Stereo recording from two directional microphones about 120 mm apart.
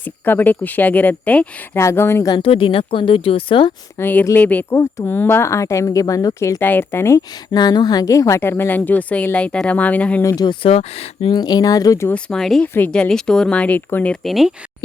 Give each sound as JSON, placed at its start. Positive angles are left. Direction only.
{"t": 0.0, "sound": "a woman's voice", "side_deg": 15}
{"t": 2.4, "sound": "speech", "side_deg": 50}
{"t": 3.9, "sound": "a woman's voice", "side_deg": 15}
{"t": 6.6, "sound": "a woman's voice", "side_deg": 15}
{"t": 10.2, "sound": "speech", "side_deg": 35}
{"t": 10.7, "sound": "speech", "side_deg": 60}
{"t": 11.3, "sound": "speech", "side_deg": 35}
{"t": 12.0, "sound": "speech", "side_deg": 5}
{"t": 12.6, "sound": "a woman's voice", "side_deg": 15}
{"t": 14.3, "sound": "speech", "side_deg": 0}